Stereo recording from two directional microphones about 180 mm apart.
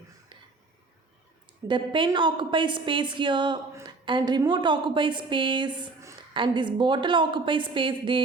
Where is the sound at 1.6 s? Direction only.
25° right (ahead or behind).